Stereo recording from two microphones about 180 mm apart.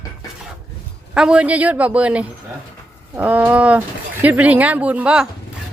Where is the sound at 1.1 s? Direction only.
5° right (ahead or behind).